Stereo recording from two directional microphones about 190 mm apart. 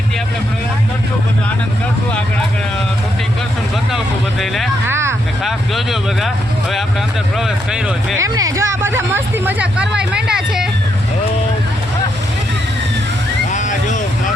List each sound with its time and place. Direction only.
3.9 s speech: centre (ahead or behind)
4.9 s speech: 15° right (ahead or behind)
5.4 s speech: centre (ahead or behind)
8.2 s speech: 15° right (ahead or behind)
13.5 s vehicle: 40° left (ahead or behind)